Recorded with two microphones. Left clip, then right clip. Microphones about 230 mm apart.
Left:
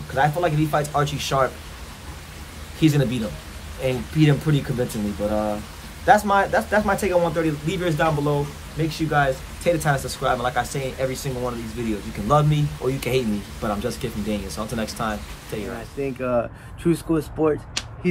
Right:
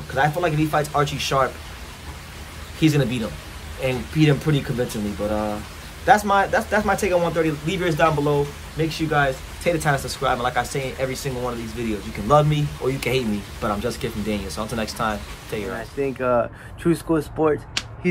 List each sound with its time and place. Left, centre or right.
0.1 s a man's voice: centre
2.8 s a man's voice: centre